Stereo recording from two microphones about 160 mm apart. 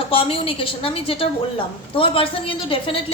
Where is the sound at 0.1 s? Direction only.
35° left (ahead or behind).